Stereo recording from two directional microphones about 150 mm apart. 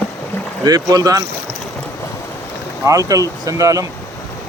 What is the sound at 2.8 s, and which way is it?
Speech, 20° right (ahead or behind).